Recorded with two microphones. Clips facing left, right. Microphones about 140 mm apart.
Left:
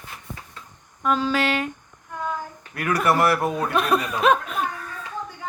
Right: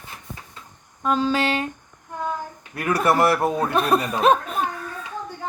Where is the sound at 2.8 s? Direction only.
25° right (ahead or behind).